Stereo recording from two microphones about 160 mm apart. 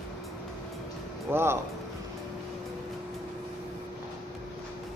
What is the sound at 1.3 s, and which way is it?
Speech, 15° right (ahead or behind).